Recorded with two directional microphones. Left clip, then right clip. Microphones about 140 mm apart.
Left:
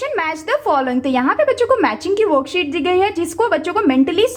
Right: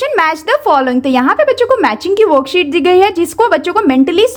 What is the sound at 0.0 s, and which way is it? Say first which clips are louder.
Speech: right 8 dB; 35° right (ahead or behind).